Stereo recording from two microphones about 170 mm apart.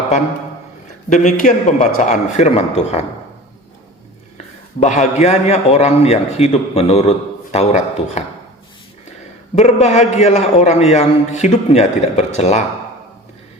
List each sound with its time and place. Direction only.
1.1 s a man's voice: 45° left (ahead or behind)
4.8 s a man's voice: 45° left (ahead or behind)
9.6 s a man's voice: 40° left (ahead or behind)